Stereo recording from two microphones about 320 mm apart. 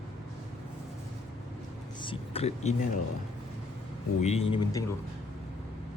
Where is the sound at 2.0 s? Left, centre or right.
Centre.